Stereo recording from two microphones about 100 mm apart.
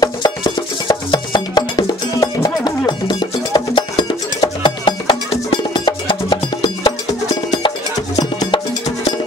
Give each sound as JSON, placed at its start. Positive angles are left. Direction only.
{"t": 0.0, "sound": "music", "side_deg": 40}
{"t": 8.2, "sound": "music", "side_deg": 45}